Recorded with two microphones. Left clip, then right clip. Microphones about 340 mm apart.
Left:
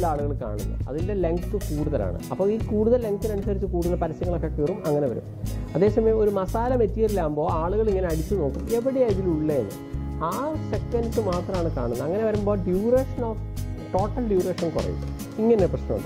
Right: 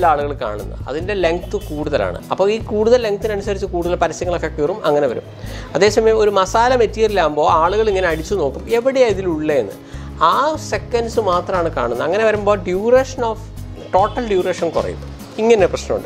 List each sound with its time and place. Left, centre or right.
0.0 s speech: centre
1.5 s speech: right
1.9 s speech: centre
8.4 s speech: centre
8.8 s speech: centre